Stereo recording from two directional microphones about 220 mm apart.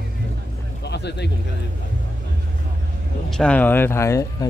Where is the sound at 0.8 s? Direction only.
50° left (ahead or behind).